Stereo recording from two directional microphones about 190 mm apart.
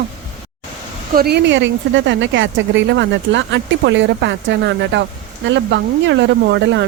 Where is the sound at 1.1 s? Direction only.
55° right (ahead or behind).